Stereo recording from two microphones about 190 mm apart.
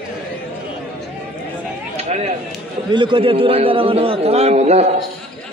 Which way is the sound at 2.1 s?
35° right (ahead or behind).